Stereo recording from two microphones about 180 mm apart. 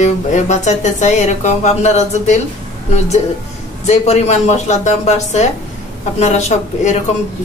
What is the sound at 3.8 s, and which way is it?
Speech, 40° left (ahead or behind).